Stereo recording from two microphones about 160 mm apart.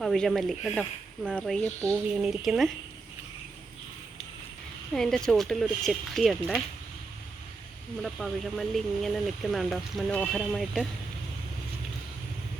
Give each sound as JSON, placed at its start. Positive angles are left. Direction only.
{"t": 0.0, "sound": "speech", "side_deg": 0}
{"t": 4.9, "sound": "speech", "side_deg": 5}
{"t": 8.0, "sound": "speech", "side_deg": 0}